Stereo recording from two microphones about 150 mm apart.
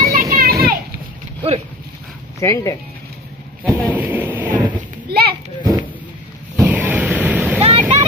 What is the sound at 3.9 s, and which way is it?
Speech, 10° right (ahead or behind).